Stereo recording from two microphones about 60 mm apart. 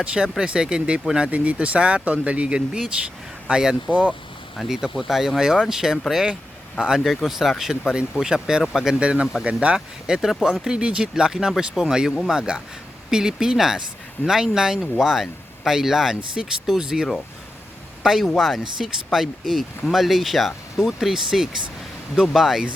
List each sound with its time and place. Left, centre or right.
0.0 s speech: centre
4.5 s speech: centre
7.1 s speech: centre